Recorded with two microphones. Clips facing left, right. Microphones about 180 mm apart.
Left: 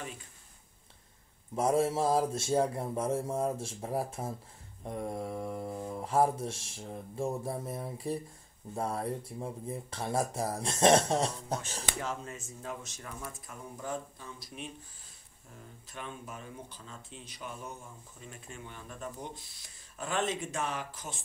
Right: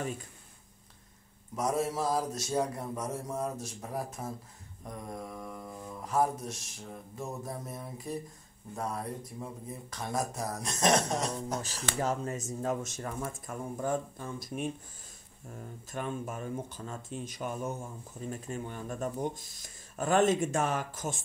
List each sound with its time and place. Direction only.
1.5 s speech: 30° left (ahead or behind)
12.0 s speech: 40° right (ahead or behind)
15.9 s speech: 45° right (ahead or behind)